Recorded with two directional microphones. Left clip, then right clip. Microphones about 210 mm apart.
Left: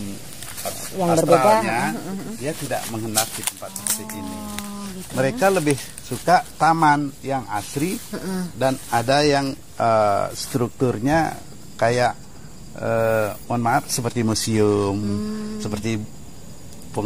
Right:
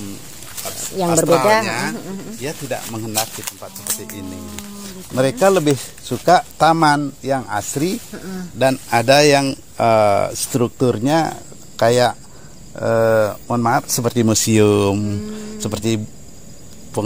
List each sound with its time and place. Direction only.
1.0 s a man's voice: 50° right (ahead or behind)
5.1 s a man's voice: 50° right (ahead or behind)
8.1 s speech: 35° left (ahead or behind)
8.5 s a man's voice: 50° right (ahead or behind)